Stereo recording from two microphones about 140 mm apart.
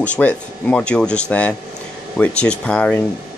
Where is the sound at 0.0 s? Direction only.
10° left (ahead or behind).